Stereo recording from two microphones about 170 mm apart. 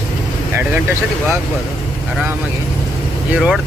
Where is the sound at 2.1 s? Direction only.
10° right (ahead or behind).